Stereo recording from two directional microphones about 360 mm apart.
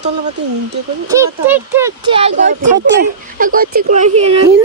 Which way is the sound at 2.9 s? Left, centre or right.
Right.